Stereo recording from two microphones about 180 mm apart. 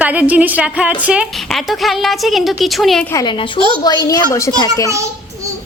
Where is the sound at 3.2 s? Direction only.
25° left (ahead or behind).